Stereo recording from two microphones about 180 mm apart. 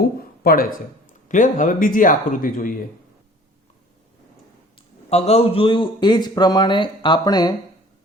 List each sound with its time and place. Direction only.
0.2 s a sound: 55° left (ahead or behind)
1.3 s speech: 45° left (ahead or behind)
5.0 s a man's voice: 35° left (ahead or behind)